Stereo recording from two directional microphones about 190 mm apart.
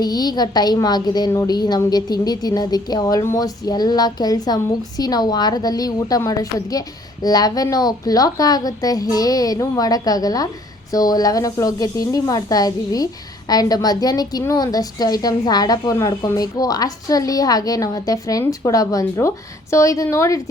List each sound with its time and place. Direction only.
0.0 s a woman's voice: 20° left (ahead or behind)